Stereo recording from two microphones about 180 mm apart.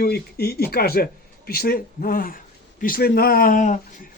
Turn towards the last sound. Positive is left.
turn(degrees=45)  # may be behind; listen again after turning